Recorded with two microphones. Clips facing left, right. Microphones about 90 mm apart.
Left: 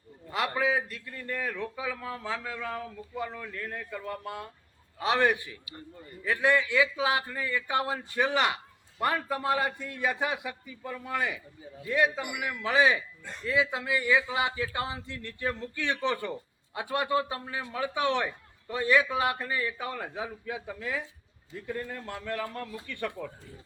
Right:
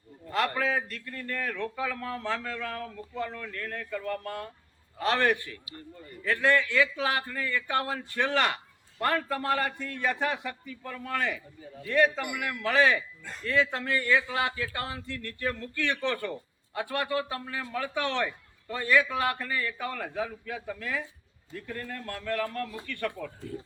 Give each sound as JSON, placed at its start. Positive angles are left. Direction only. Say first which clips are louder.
{"t": 0.3, "sound": "a man's voice", "louder": "even", "side_deg": 10}